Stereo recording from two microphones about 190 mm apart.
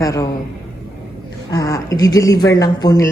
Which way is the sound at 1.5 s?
20° left (ahead or behind).